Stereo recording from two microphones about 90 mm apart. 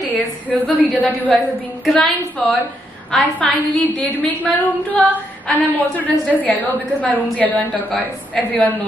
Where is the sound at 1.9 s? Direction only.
5° left (ahead or behind).